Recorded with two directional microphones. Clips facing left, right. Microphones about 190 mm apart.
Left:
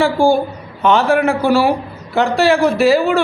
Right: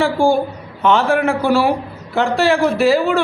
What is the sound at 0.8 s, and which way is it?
A man's voice, 15° left (ahead or behind).